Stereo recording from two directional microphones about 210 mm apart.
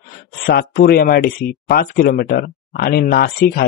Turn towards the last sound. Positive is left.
turn(degrees=45)  # may be behind; listen again after turning